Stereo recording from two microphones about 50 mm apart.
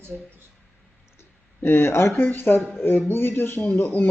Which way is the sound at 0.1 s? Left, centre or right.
Centre.